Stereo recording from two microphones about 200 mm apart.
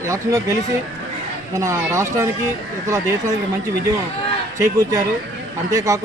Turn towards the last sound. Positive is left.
turn(degrees=-15)  # may be behind; listen again after turning